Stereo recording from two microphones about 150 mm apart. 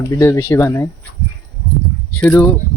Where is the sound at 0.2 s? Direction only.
15° left (ahead or behind).